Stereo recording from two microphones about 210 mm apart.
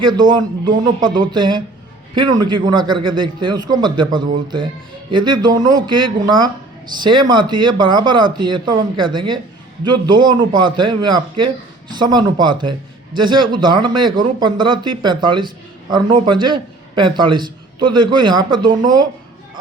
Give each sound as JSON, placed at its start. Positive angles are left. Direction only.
{"t": 0.0, "sound": "speech", "side_deg": -20}